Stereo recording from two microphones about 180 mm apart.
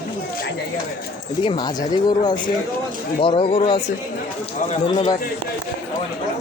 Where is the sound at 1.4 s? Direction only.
25° left (ahead or behind).